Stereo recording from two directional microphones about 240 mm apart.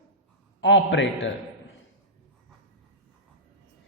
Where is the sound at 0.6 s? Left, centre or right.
Left.